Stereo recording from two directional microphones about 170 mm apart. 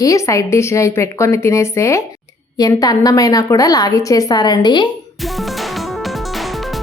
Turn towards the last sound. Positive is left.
turn(degrees=25)  # may be behind; listen again after turning